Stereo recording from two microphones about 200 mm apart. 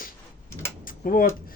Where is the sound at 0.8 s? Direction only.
45° left (ahead or behind).